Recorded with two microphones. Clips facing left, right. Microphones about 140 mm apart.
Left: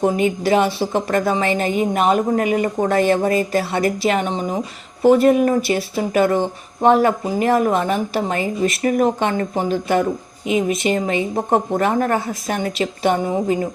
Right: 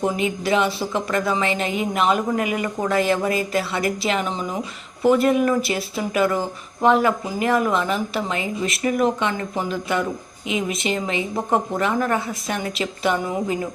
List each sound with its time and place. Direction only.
0.0 s speech: 40° left (ahead or behind)